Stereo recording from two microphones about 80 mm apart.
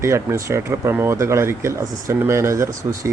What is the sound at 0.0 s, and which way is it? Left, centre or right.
Speech, right.